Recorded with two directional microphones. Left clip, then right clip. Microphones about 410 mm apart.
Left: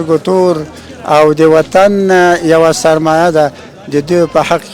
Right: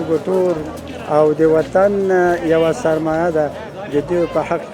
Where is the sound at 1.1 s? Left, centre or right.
Left.